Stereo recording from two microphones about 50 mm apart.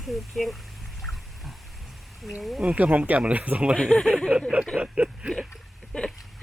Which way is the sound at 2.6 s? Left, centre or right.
Right.